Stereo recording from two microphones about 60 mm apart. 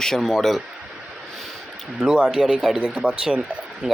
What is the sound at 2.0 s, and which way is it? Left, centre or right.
Speech, centre.